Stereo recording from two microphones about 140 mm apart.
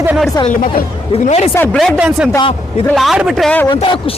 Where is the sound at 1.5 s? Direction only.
15° left (ahead or behind).